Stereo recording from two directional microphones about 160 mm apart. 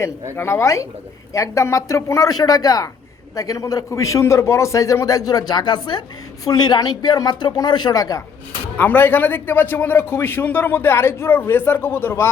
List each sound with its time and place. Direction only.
0.3 s a man's voice: 20° left (ahead or behind)
8.8 s a man's voice: 10° left (ahead or behind)